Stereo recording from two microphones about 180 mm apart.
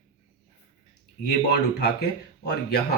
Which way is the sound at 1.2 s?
70° left (ahead or behind).